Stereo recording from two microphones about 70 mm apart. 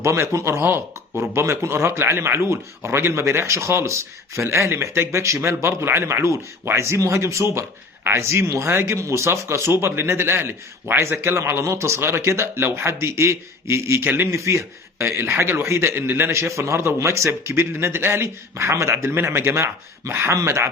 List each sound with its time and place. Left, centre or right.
0.0 s a man's voice: right